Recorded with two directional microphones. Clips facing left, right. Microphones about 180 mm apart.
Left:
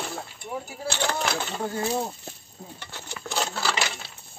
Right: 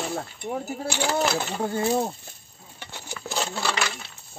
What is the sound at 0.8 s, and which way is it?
Speech, 10° right (ahead or behind).